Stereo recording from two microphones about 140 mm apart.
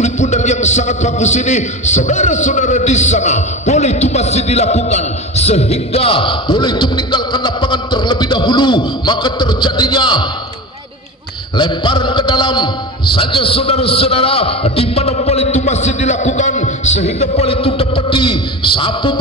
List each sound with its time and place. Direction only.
0.0 s a man's voice: 55° left (ahead or behind); by 10.2 s 35° left (ahead or behind)
11.5 s a man's voice: 35° left (ahead or behind)